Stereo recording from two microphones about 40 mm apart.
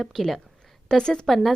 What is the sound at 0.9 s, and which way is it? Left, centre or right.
Speech, centre.